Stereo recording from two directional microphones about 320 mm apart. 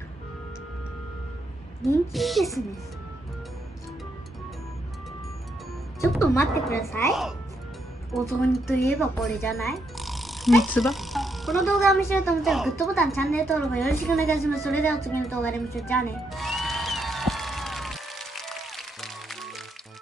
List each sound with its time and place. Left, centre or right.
1.8 s speech: centre
5.9 s speech: centre
9.9 s a sound: centre